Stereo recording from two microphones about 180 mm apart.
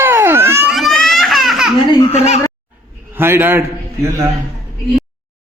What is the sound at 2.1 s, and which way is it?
Speech, 35° left (ahead or behind).